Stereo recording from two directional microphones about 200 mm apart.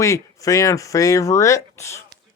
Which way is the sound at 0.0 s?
15° left (ahead or behind).